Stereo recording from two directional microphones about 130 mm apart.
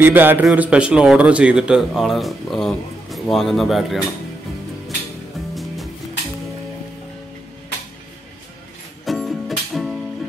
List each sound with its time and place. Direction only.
0.0 s a man's voice: 15° right (ahead or behind); by 4.0 s centre (ahead or behind)
5.5 s music: centre (ahead or behind)
9.0 s music: centre (ahead or behind)